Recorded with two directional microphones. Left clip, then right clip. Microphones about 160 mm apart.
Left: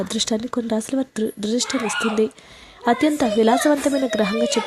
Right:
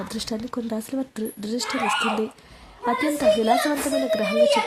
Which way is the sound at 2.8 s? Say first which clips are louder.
Left 1 dB; 30° left (ahead or behind).